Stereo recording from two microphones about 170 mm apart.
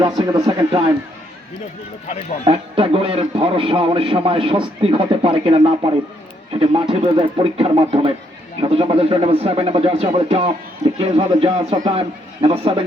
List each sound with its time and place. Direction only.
0.0 s speech: 25° right (ahead or behind)
2.4 s a man's voice: 30° right (ahead or behind)